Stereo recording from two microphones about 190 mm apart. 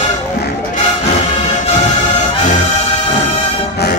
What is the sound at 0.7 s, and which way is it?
Music, 35° left (ahead or behind).